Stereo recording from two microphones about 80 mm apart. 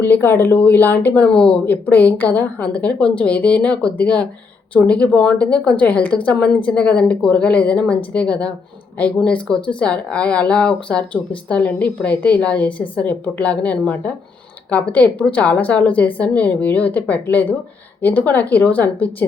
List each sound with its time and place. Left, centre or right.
0.0 s a woman's voice: left